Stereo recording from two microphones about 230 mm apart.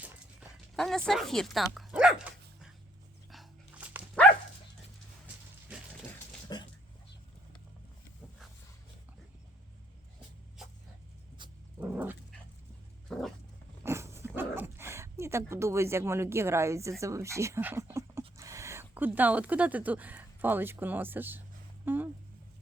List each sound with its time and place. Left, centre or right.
0.0 s dog: centre
5.2 s a sound: centre
6.5 s a sound: centre
11.4 s dog: right
11.8 s dog: centre
13.1 s roaring cats: centre
13.8 s dog: centre
17.0 s speech: centre
21.8 s a sound: centre